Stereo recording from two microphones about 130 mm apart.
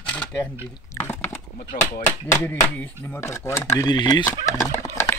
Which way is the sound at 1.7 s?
80° left.